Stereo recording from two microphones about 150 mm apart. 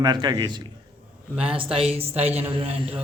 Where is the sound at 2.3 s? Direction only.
10° right (ahead or behind).